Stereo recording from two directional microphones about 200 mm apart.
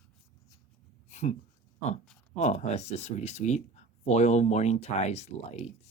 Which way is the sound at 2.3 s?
35° left (ahead or behind).